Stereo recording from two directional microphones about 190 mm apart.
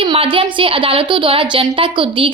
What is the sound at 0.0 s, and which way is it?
A woman's voice, 30° right (ahead or behind).